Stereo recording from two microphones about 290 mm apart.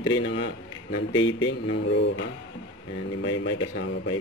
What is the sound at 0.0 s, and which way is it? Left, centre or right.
A man's voice, left.